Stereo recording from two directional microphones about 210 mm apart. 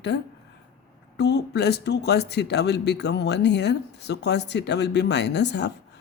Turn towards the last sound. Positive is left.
turn(degrees=55)  # may be behind; listen again after turning